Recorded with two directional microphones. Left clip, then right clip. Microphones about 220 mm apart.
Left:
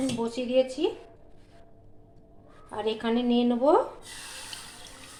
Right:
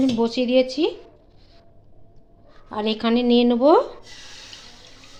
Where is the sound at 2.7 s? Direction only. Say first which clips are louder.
Right 6 dB; 45° right (ahead or behind).